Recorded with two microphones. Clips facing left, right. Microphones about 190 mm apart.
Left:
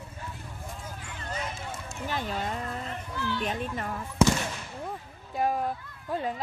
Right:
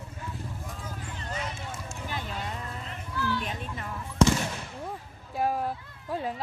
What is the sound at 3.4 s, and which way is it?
Speech, 45° left (ahead or behind).